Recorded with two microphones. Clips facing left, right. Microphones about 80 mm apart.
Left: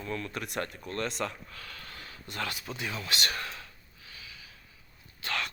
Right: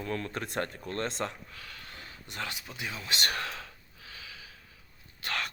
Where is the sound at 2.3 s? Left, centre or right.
Centre.